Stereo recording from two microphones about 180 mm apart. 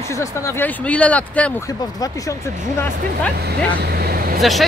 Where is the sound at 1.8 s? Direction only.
20° left (ahead or behind).